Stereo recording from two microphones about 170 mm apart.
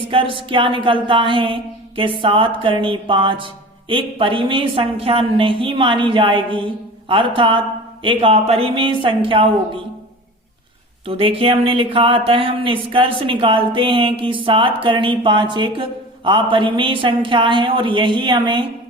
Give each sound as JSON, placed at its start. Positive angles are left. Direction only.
{"t": 0.1, "sound": "a woman's voice", "side_deg": -30}
{"t": 11.0, "sound": "speech", "side_deg": -35}